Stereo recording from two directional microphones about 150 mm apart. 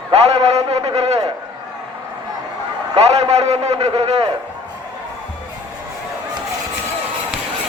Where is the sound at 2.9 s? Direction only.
45° right (ahead or behind).